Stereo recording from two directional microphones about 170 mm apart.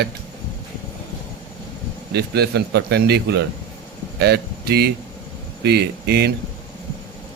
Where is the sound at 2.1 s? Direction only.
75° right (ahead or behind).